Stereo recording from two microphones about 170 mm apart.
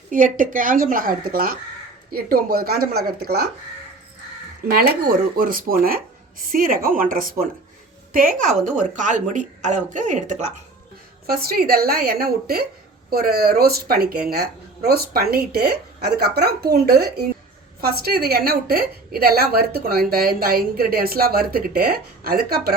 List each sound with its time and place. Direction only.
0.1 s a woman's voice: 50° right (ahead or behind); by 3.5 s 70° right (ahead or behind)
5.4 s a woman's voice: 55° right (ahead or behind)
11.3 s a woman's voice: 60° right (ahead or behind)